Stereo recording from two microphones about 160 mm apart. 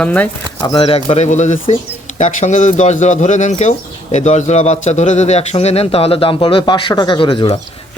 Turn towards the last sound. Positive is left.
turn(degrees=35)  # may be behind; listen again after turning